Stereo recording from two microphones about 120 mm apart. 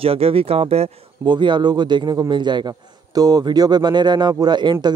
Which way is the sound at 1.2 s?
40° right (ahead or behind).